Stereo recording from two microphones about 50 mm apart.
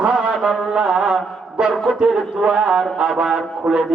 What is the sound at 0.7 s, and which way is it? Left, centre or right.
Speech, centre.